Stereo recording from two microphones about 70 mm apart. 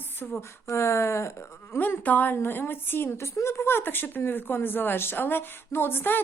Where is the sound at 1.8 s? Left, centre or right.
Left.